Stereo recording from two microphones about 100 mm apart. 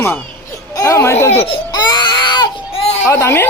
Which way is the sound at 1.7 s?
45° left (ahead or behind).